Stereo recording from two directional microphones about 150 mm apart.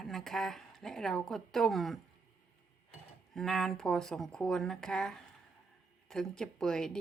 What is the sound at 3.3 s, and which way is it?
Speech, centre (ahead or behind).